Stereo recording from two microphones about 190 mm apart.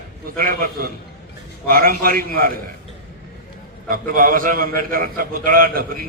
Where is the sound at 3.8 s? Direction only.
50° right (ahead or behind).